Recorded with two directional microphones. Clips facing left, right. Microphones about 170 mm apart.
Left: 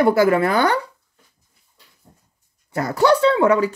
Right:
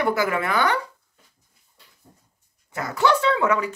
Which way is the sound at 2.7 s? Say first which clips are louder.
Left 5 dB; 35° left (ahead or behind).